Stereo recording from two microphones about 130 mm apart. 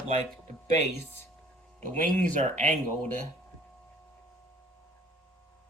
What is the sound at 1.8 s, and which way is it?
Speech, 90° right.